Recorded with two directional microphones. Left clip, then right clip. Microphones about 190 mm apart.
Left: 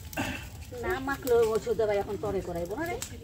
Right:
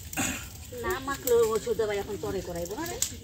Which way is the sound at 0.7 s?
30° left (ahead or behind).